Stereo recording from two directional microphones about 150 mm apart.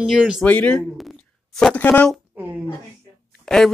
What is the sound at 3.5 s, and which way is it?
Speech, 5° left (ahead or behind).